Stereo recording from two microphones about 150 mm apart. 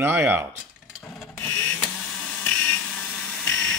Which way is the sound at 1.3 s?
15° left (ahead or behind).